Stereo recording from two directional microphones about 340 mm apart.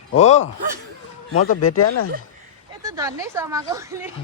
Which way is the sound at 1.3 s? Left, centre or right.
Left.